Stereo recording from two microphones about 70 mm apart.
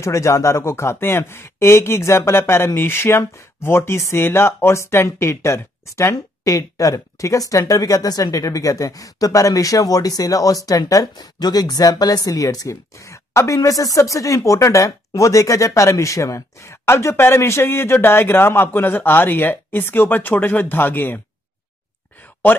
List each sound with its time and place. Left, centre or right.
0.0 s speech: left
6.1 s speech: left